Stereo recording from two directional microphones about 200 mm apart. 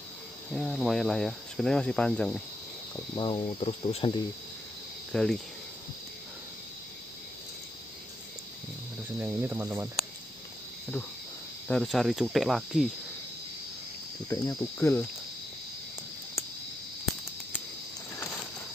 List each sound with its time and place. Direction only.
0.5 s speech: centre (ahead or behind)
3.2 s speech: 25° left (ahead or behind)
5.1 s speech: 5° left (ahead or behind)
9.2 s speech: 10° right (ahead or behind)
11.6 s speech: 5° left (ahead or behind)
14.3 s speech: 15° left (ahead or behind)